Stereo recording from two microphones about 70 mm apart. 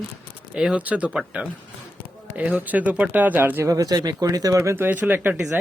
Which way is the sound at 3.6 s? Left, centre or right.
Right.